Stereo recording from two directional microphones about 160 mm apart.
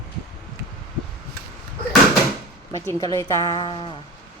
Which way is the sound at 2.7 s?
20° left (ahead or behind).